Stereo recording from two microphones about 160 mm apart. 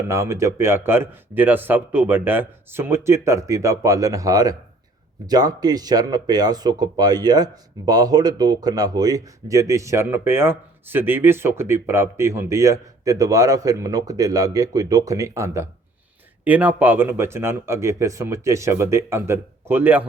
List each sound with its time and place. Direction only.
0.1 s speech: 20° right (ahead or behind)